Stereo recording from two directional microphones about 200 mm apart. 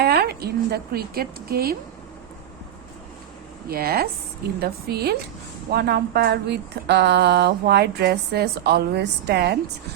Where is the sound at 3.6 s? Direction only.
50° right (ahead or behind).